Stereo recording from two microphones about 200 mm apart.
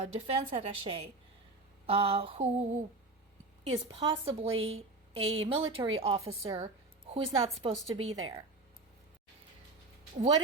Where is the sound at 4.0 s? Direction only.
25° right (ahead or behind).